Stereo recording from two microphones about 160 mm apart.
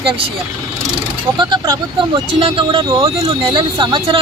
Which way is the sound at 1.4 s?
25° right (ahead or behind).